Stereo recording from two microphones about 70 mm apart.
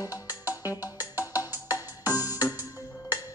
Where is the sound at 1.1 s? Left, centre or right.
Right.